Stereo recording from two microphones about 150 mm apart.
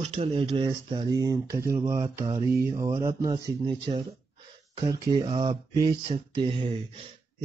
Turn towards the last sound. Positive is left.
turn(degrees=-40)  # may be behind; listen again after turning